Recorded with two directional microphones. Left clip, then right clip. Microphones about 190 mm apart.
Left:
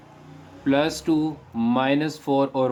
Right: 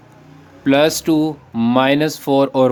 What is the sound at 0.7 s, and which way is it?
Speech, 50° right (ahead or behind).